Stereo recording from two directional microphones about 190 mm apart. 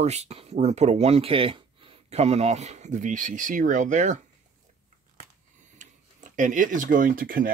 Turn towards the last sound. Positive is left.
turn(degrees=-50)  # may be behind; listen again after turning